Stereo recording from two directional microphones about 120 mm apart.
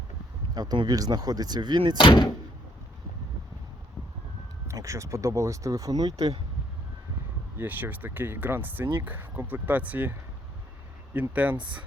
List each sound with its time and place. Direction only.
0.5 s speech: 35° right (ahead or behind)
2.0 s speech: 45° left (ahead or behind)
4.7 s speech: 25° right (ahead or behind)
6.1 s speech: 60° right (ahead or behind)
7.6 s speech: 15° right (ahead or behind)